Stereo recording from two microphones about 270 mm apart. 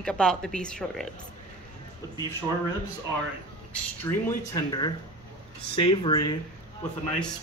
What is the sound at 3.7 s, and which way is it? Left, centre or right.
Speech, centre.